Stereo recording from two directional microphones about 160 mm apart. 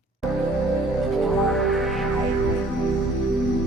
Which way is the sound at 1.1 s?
Centre (ahead or behind).